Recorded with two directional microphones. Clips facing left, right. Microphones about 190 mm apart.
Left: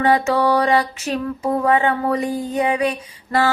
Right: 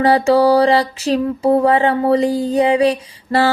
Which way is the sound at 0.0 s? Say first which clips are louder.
Right 5 dB; 35° right (ahead or behind).